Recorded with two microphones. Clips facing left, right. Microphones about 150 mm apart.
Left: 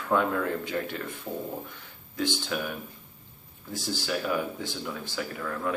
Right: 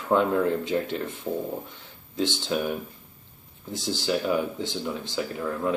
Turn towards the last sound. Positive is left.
turn(degrees=-20)  # may be behind; listen again after turning